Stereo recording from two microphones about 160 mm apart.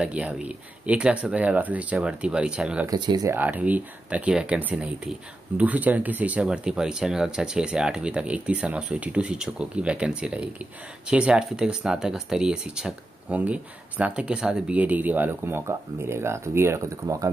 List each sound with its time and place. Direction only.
0.0 s speech: 5° right (ahead or behind)
2.9 s speech: 25° right (ahead or behind)
3.3 s speech: 10° right (ahead or behind)